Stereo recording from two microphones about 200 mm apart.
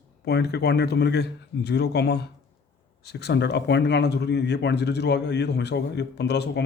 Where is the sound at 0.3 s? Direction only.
55° left (ahead or behind).